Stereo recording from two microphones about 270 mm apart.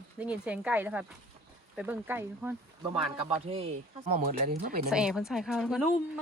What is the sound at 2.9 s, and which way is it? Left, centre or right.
Speech, right.